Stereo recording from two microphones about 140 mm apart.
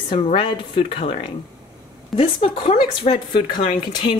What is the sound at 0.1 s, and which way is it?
Speech, 40° left (ahead or behind).